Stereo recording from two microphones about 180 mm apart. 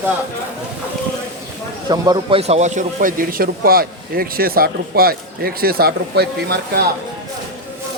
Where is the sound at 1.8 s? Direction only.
25° right (ahead or behind); by 6.8 s 60° right (ahead or behind).